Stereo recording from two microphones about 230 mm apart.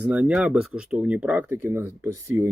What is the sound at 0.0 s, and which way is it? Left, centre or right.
Speech, centre.